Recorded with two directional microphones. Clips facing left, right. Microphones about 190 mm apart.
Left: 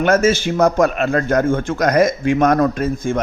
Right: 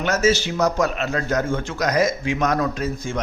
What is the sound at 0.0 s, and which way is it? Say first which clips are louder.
A man's voice: left 5 dB; 55° left (ahead or behind).